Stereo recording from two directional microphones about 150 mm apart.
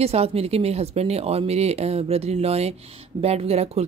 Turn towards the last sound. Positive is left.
turn(degrees=-45)  # may be behind; listen again after turning